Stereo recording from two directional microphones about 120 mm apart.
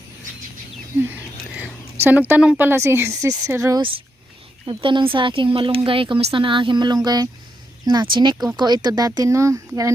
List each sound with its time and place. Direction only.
1.0 s whispering: 15° right (ahead or behind)
2.0 s speech: 15° right (ahead or behind)
3.8 s speech: 45° right (ahead or behind); by 9.9 s 25° right (ahead or behind)